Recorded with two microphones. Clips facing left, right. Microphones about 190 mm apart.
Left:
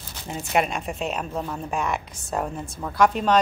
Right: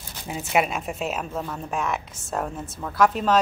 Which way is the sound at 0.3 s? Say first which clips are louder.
Even; 5° right (ahead or behind).